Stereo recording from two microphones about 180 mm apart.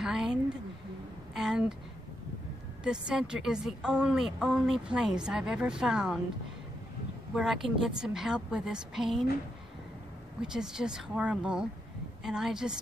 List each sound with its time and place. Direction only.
0.0 s a woman's voice: 5° right (ahead or behind)
2.8 s a woman's voice: 5° right (ahead or behind)
7.3 s a woman's voice: centre (ahead or behind)
10.4 s a woman's voice: 5° right (ahead or behind)